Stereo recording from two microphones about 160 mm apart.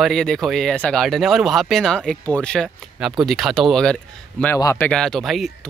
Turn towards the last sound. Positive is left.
turn(degrees=0)  # may be behind; listen again after turning